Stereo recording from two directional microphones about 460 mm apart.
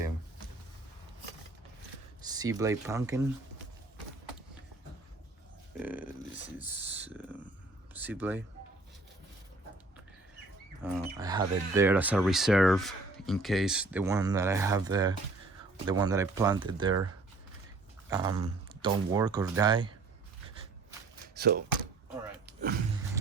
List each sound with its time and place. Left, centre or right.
2.2 s speech: centre
5.7 s speech: centre
10.8 s speech: centre
18.1 s speech: centre
21.3 s speech: right